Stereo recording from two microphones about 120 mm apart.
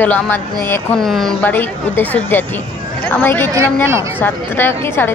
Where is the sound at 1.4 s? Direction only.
15° left (ahead or behind).